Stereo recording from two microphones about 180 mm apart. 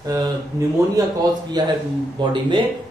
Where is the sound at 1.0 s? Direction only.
20° right (ahead or behind).